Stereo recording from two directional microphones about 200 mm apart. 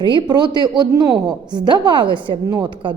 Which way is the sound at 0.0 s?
25° right (ahead or behind).